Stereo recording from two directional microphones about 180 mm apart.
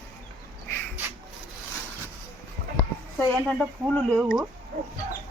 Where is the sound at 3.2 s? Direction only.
5° left (ahead or behind).